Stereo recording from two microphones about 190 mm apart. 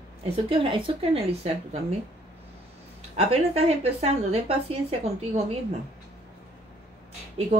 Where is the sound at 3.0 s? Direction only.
35° right (ahead or behind).